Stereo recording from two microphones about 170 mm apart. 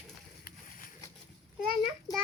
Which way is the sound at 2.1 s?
20° left (ahead or behind).